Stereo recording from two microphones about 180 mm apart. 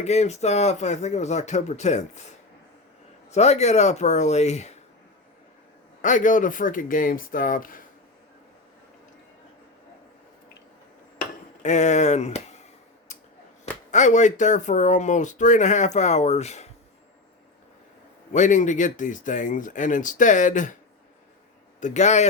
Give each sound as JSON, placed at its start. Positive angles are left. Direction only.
{"t": 0.0, "sound": "speech", "side_deg": 35}
{"t": 3.3, "sound": "speech", "side_deg": 40}
{"t": 6.0, "sound": "speech", "side_deg": 45}
{"t": 11.6, "sound": "speech", "side_deg": 40}
{"t": 13.1, "sound": "scissors", "side_deg": 40}
{"t": 13.9, "sound": "speech", "side_deg": 40}
{"t": 18.3, "sound": "speech", "side_deg": 45}
{"t": 21.8, "sound": "speech", "side_deg": 40}